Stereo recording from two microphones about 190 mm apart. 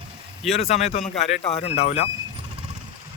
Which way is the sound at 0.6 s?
35° left (ahead or behind).